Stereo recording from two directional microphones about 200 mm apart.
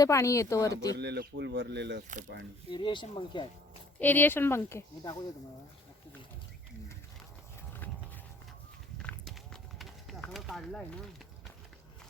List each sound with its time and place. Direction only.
0.0 s speech: 15° left (ahead or behind)
0.9 s speech: 55° right (ahead or behind)
2.6 s speech: 25° left (ahead or behind)
4.0 s speech: 10° left (ahead or behind)
9.0 s run: centre (ahead or behind)